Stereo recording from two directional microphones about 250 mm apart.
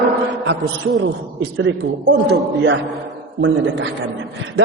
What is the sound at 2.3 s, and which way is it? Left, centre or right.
Speech, right.